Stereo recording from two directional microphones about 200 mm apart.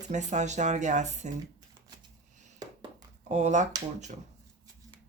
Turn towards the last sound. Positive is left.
turn(degrees=-35)  # may be behind; listen again after turning